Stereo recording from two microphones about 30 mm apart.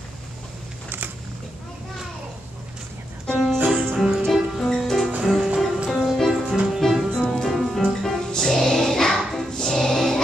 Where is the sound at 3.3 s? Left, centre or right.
Left.